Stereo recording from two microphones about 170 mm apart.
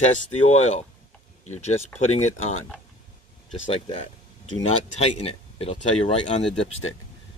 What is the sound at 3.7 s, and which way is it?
Speech, 35° left (ahead or behind).